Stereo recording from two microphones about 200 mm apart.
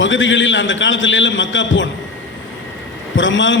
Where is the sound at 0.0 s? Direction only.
70° left (ahead or behind).